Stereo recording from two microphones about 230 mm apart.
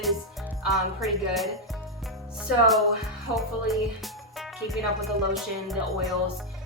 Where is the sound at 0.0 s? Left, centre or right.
Centre.